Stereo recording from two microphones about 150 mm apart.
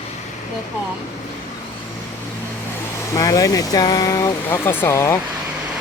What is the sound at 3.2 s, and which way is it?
Speech, 25° left (ahead or behind).